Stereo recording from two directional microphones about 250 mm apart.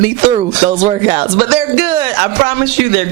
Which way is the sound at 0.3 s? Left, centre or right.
Centre.